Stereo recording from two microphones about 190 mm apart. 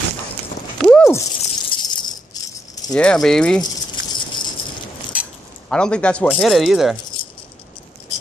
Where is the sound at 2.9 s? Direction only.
5° left (ahead or behind).